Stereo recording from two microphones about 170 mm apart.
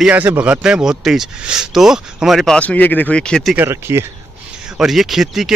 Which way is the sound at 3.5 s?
15° right (ahead or behind).